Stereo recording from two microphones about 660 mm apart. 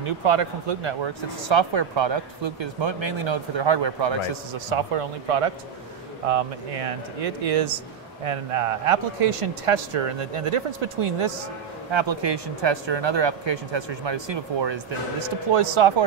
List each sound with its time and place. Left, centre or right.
0.0 s speech: right
7.4 s a man's voice: right